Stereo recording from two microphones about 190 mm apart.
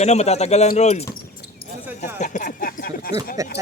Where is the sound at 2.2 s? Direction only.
40° left (ahead or behind).